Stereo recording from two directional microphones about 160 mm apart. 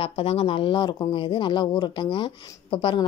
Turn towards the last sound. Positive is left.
turn(degrees=30)  # may be behind; listen again after turning